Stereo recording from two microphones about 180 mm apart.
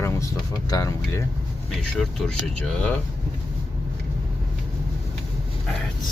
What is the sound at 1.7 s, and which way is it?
Speech, centre (ahead or behind).